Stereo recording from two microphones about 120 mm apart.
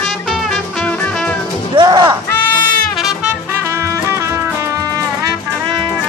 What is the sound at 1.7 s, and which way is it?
Music, 40° right (ahead or behind).